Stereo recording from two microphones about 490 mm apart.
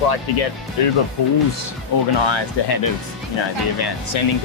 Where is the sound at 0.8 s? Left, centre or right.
Left.